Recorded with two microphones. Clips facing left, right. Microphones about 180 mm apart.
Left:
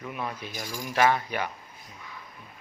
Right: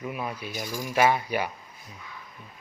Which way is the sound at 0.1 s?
10° right (ahead or behind).